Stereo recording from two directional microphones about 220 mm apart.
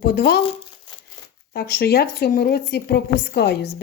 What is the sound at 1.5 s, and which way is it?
A woman's voice, 45° left (ahead or behind).